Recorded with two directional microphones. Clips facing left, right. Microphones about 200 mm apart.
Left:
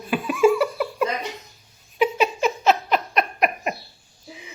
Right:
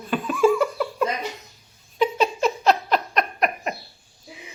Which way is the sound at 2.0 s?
5° left (ahead or behind).